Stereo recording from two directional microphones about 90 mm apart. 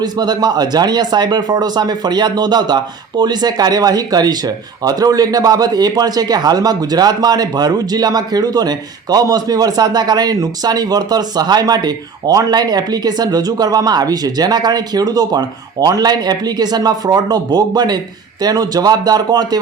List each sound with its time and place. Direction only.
0.0 s speech: 50° right (ahead or behind)